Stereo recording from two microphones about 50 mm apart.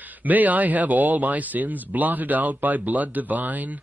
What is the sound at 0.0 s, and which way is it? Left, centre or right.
A man's voice, right.